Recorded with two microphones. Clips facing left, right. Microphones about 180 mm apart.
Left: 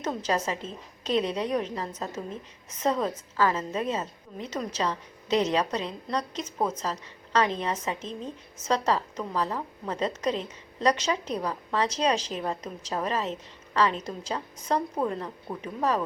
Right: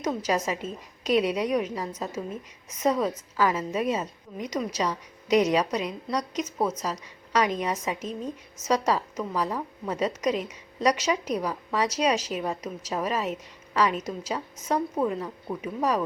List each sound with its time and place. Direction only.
0.0 s a woman's voice: 10° right (ahead or behind)